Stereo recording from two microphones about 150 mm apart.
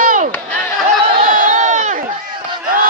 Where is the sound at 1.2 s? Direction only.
60° right (ahead or behind).